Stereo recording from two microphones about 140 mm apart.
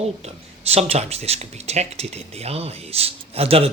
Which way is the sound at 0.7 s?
45° right (ahead or behind).